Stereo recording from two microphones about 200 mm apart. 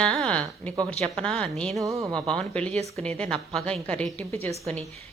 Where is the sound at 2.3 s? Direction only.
5° left (ahead or behind).